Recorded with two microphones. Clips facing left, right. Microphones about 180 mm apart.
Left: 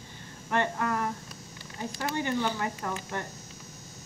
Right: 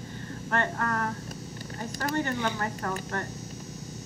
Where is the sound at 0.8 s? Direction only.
10° left (ahead or behind).